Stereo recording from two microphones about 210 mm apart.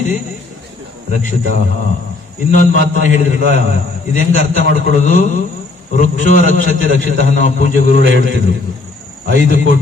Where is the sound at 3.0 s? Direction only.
35° left (ahead or behind).